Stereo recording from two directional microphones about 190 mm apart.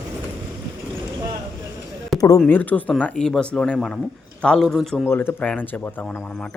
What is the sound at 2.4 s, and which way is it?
A man's voice, 10° left (ahead or behind).